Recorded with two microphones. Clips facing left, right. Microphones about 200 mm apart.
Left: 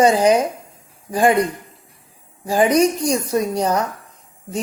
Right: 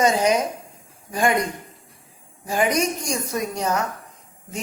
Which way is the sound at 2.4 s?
35° left (ahead or behind).